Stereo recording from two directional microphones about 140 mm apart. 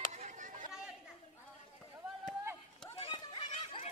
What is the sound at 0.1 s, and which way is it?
Chatter, 60° right (ahead or behind).